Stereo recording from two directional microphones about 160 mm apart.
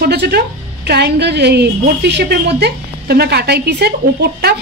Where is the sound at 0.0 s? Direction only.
80° right.